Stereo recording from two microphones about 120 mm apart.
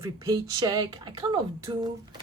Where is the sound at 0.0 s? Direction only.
30° right (ahead or behind).